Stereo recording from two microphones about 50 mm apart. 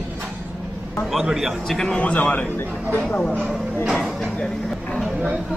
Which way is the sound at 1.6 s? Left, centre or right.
Centre.